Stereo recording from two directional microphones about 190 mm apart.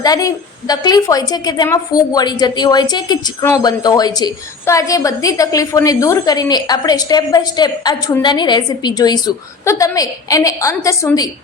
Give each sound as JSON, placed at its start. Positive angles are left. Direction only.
{"t": 0.0, "sound": "a woman's voice", "side_deg": 20}